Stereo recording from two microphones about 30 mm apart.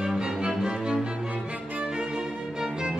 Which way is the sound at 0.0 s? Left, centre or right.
Right.